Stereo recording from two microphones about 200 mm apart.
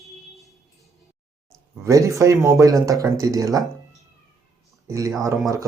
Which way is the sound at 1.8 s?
15° right (ahead or behind).